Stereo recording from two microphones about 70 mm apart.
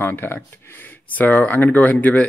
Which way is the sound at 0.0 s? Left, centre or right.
Left.